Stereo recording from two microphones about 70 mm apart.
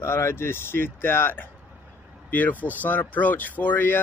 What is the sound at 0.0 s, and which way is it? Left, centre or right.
Speech, left.